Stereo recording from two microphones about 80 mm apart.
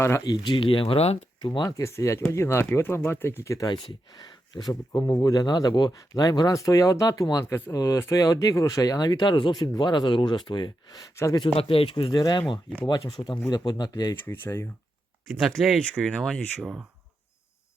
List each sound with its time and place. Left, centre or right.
0.4 s speech: left
1.4 s speech: left
1.7 s speech: left
3.7 s speech: left
11.3 s speech: left
12.2 s speech: left
12.9 s speech: left
14.3 s speech: left
15.3 s speech: centre